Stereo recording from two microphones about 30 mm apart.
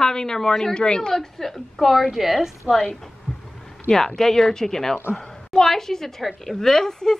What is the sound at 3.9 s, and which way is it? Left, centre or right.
A woman's voice, centre.